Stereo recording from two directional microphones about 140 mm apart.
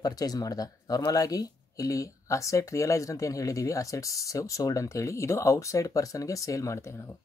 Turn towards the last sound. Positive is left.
turn(degrees=20)  # may be behind; listen again after turning